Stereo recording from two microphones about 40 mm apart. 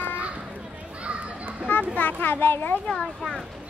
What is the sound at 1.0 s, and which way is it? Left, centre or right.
Children playing, right.